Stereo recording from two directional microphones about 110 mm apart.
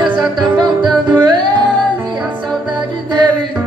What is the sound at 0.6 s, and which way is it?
Music, 45° right (ahead or behind).